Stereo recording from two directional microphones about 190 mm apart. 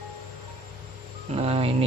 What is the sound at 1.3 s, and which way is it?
Speech, 30° right (ahead or behind).